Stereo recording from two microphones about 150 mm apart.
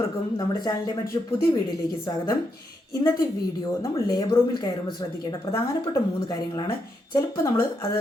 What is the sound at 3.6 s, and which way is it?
Speech, 25° left (ahead or behind).